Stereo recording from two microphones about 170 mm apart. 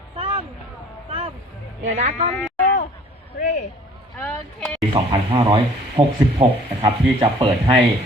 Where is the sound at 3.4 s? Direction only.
45° left (ahead or behind).